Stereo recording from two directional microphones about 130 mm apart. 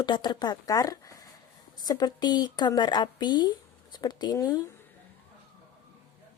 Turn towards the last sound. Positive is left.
turn(degrees=30)  # may be behind; listen again after turning